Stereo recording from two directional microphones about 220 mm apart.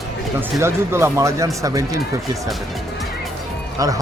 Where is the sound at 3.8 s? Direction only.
15° right (ahead or behind).